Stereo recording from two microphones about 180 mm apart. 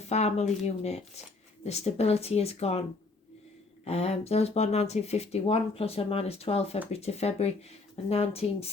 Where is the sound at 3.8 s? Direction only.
35° left (ahead or behind).